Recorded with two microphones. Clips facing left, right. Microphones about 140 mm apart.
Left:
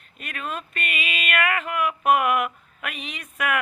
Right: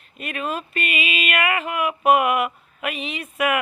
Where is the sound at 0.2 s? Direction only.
10° right (ahead or behind).